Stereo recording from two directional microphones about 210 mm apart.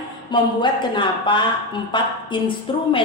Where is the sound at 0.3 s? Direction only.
20° left (ahead or behind).